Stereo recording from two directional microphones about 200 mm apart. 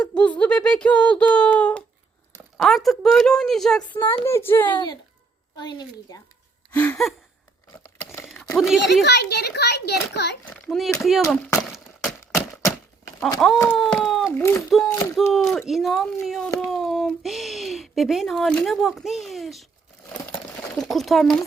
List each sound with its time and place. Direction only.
0.0 s a woman's voice: 5° left (ahead or behind)
4.7 s a woman's voice: 20° left (ahead or behind)
6.7 s speech: 5° left (ahead or behind)
7.9 s a sound: 15° left (ahead or behind)
8.5 s a woman's voice: centre (ahead or behind)
9.0 s a child's voice: 55° left (ahead or behind)
10.4 s a woman's voice: centre (ahead or behind)
13.6 s speech: 5° left (ahead or behind)
14.3 s speech: 15° left (ahead or behind)
15.3 s a woman's voice: centre (ahead or behind)
20.7 s a woman's voice: centre (ahead or behind)